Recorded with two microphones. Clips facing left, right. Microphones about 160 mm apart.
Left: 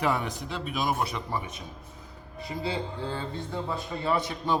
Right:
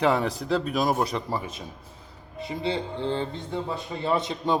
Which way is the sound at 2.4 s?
25° right (ahead or behind).